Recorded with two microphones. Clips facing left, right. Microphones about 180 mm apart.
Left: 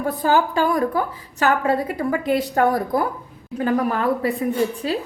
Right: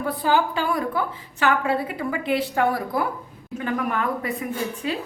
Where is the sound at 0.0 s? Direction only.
45° left (ahead or behind).